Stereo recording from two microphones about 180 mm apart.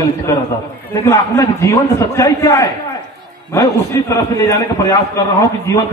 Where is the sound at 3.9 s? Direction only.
15° left (ahead or behind).